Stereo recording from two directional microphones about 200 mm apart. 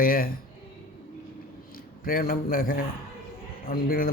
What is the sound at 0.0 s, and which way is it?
Speech, 45° left (ahead or behind).